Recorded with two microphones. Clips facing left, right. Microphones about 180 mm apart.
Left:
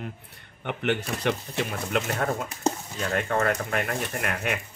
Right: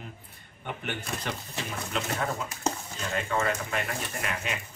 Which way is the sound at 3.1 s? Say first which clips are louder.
Left 3 dB; 60° left (ahead or behind).